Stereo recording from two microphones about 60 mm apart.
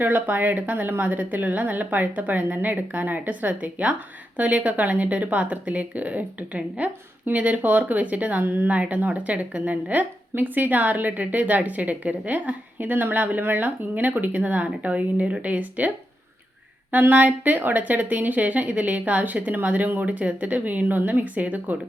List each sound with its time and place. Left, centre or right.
0.0 s speech: right
16.9 s speech: right